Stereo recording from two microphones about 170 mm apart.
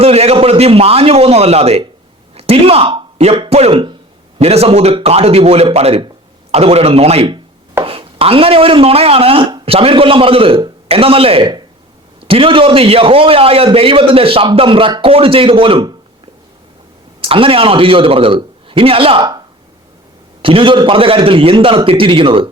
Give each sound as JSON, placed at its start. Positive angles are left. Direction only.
{"t": 0.0, "sound": "a man's voice", "side_deg": -35}
{"t": 17.2, "sound": "a man's voice", "side_deg": -30}
{"t": 20.4, "sound": "a man's voice", "side_deg": -30}